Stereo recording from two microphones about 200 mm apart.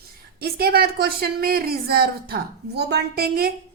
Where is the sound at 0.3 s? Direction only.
50° right (ahead or behind).